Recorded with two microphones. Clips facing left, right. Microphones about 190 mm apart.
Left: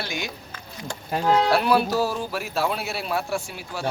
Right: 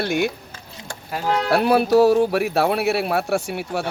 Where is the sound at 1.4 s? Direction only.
60° right (ahead or behind).